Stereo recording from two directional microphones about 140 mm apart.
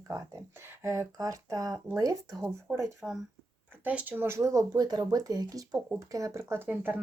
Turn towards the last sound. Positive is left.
turn(degrees=-15)  # may be behind; listen again after turning